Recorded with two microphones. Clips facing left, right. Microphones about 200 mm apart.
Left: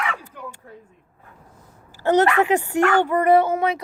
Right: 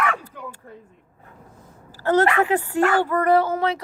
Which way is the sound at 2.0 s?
20° left (ahead or behind).